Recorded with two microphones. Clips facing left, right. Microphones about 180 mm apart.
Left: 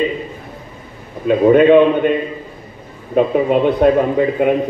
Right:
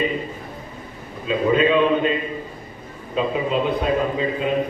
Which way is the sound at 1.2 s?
60° left (ahead or behind).